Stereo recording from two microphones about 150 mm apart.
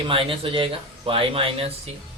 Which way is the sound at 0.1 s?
35° right (ahead or behind).